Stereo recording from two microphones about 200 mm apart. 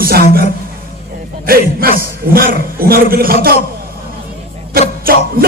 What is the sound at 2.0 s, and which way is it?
A man's voice, 45° right (ahead or behind).